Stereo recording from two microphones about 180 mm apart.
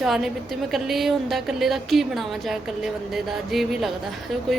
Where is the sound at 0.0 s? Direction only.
Centre (ahead or behind).